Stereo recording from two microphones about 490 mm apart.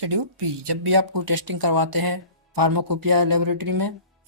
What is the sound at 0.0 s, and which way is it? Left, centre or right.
Speech, right.